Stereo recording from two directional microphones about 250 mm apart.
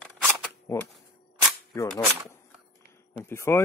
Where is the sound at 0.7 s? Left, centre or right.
Centre.